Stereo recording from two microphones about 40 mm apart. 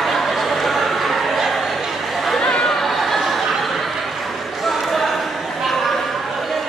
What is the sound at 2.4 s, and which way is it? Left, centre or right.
Chatter, left.